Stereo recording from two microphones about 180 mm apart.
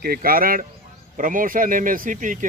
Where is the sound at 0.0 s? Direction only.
55° right (ahead or behind).